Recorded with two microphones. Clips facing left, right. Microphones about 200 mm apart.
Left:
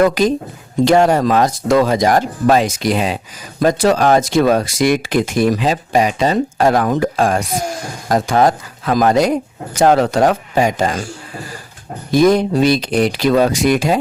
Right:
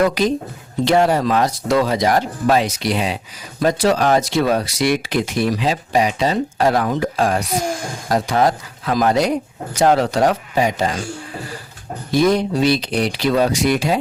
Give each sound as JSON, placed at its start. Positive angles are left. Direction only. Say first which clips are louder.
{"t": 0.0, "sound": "speech", "louder": "left 3 dB", "side_deg": 45}
{"t": 12.1, "sound": "speech", "louder": "left 4 dB", "side_deg": 45}